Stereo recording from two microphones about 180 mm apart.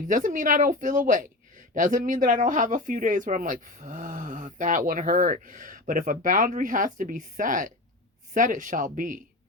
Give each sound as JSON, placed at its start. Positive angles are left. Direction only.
{"t": 0.1, "sound": "speech", "side_deg": -45}